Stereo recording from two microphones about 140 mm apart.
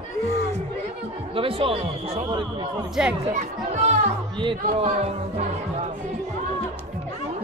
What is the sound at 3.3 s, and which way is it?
Speech, 60° right (ahead or behind).